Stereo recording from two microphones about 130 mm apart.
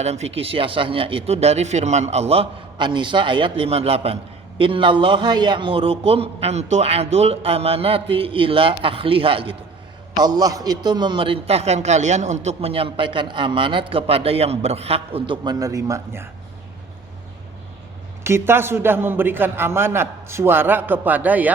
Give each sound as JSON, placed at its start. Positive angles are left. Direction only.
{"t": 0.0, "sound": "a man's voice", "side_deg": -55}
{"t": 10.2, "sound": "a man's voice", "side_deg": -30}
{"t": 15.4, "sound": "speech", "side_deg": -25}
{"t": 18.2, "sound": "a man's voice", "side_deg": -20}